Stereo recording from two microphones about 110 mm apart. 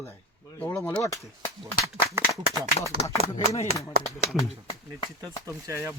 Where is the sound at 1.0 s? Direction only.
30° left (ahead or behind).